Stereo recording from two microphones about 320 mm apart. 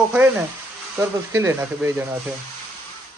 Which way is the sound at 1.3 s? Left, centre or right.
Centre.